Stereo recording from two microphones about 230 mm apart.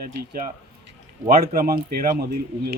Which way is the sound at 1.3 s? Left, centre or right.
Right.